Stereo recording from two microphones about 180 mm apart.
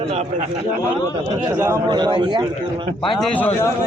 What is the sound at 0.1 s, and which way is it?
Speech, 40° right (ahead or behind).